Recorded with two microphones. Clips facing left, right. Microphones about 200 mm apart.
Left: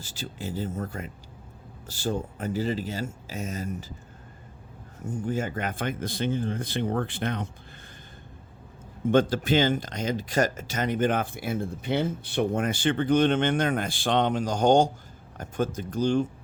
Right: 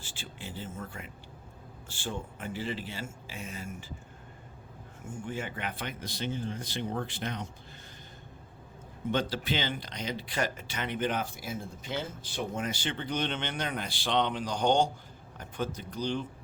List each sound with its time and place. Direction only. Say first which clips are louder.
0.0 s speech: left 8 dB; 40° left (ahead or behind)
5.0 s speech: left 8 dB; 40° left (ahead or behind); by 7.4 s 55° left (ahead or behind)
9.0 s speech: left 9 dB; 50° left (ahead or behind)